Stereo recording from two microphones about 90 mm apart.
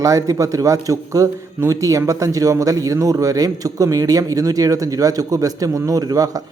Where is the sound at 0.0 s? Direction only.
40° right (ahead or behind).